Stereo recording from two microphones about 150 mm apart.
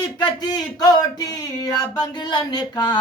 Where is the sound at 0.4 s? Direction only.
25° left (ahead or behind).